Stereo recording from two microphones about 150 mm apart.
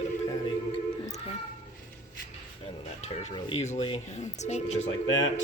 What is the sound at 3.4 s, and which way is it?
Speech, 45° left (ahead or behind).